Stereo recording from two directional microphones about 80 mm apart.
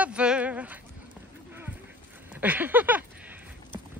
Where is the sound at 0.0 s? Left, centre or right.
Centre.